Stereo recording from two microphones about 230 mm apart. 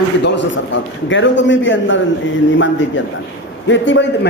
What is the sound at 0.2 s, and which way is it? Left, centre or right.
A woman's voice, left.